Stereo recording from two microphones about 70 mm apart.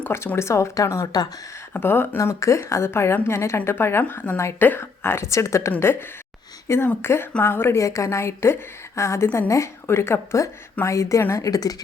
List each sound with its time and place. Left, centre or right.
0.3 s speech: left
1.7 s a woman's voice: left
2.1 s a woman's voice: left
5.8 s a woman's voice: left
7.8 s a woman's voice: left
11.4 s speech: left